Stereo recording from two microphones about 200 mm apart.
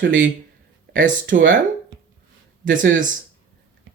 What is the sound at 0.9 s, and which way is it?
Speech, 40° right (ahead or behind).